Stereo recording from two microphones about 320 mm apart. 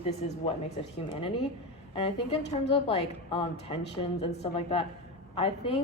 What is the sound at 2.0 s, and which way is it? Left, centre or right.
A woman's voice, centre.